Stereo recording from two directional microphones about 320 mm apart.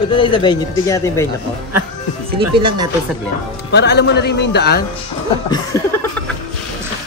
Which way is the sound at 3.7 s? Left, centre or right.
Left.